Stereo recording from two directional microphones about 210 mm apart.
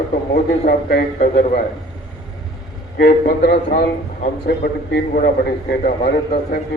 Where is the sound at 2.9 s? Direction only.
50° left (ahead or behind).